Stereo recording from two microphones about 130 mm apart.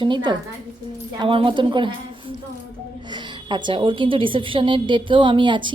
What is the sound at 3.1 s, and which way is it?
A woman's voice, 35° right (ahead or behind).